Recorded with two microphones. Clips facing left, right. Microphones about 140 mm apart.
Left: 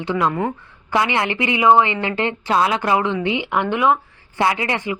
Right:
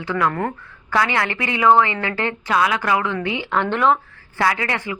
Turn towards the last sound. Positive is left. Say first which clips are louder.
# left 2 dB
turn(degrees=20)  # may be behind; listen again after turning